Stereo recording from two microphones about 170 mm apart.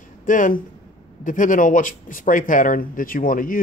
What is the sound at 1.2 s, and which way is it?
Speech, 50° left (ahead or behind).